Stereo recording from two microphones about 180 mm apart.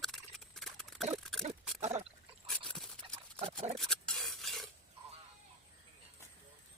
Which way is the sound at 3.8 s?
Centre (ahead or behind).